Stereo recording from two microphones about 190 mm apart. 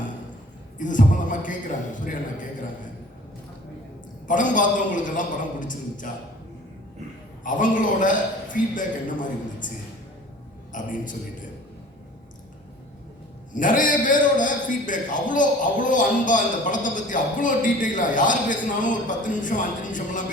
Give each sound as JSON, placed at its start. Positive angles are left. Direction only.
{"t": 0.8, "sound": "a man's voice", "side_deg": 45}
{"t": 4.3, "sound": "a man's voice", "side_deg": 45}
{"t": 7.4, "sound": "a man's voice", "side_deg": 45}
{"t": 10.7, "sound": "a man's voice", "side_deg": 45}
{"t": 13.5, "sound": "a man's voice", "side_deg": 45}